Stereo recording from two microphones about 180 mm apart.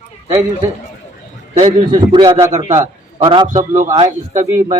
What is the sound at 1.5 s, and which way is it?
A man's voice, 25° right (ahead or behind).